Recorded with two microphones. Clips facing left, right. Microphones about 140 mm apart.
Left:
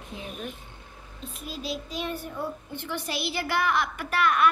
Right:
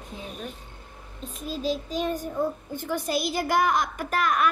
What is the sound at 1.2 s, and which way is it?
A child's voice, 40° right (ahead or behind).